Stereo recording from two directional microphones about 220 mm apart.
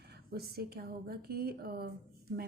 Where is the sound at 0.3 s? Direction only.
45° right (ahead or behind).